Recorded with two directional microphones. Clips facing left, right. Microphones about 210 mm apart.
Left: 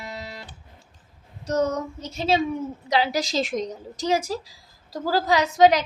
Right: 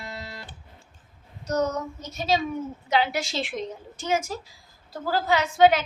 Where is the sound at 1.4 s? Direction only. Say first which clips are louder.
Left 2 dB; 30° left (ahead or behind).